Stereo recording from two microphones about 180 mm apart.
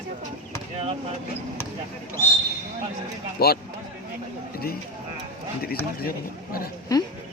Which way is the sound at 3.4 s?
60° left (ahead or behind).